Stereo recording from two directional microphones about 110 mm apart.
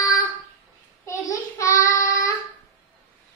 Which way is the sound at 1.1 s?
30° left (ahead or behind).